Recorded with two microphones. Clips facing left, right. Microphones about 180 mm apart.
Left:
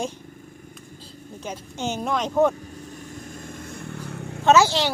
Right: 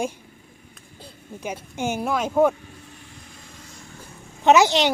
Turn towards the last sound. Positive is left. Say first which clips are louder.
# right 1 dB
turn(degrees=-20)  # may be behind; listen again after turning